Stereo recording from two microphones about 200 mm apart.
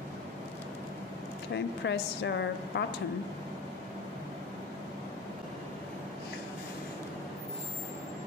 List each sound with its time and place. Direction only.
1.5 s a woman's voice: 60° left (ahead or behind)